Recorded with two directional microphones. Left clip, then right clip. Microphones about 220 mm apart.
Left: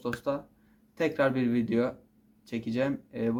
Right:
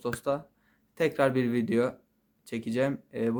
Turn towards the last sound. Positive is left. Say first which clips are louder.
# right 1 dB
turn(degrees=-45)  # may be behind; listen again after turning